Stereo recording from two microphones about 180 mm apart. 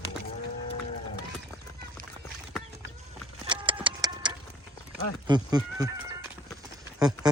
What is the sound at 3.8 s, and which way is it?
Clock, 25° right (ahead or behind).